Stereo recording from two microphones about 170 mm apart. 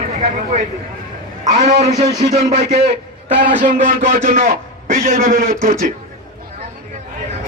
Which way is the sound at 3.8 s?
55° right (ahead or behind).